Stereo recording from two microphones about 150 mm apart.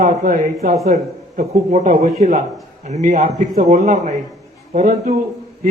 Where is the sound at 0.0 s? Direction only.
65° right (ahead or behind).